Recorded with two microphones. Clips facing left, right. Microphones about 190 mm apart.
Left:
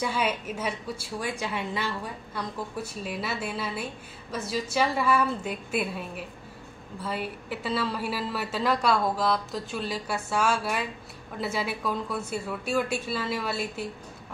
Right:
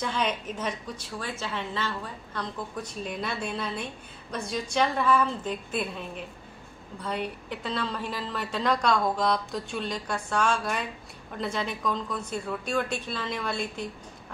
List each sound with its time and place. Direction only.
0.0 s a woman's voice: 10° left (ahead or behind)